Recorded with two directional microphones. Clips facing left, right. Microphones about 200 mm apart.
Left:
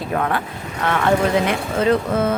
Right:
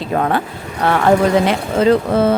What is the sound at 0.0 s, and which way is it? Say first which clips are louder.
Speech: right 4 dB; 30° right (ahead or behind).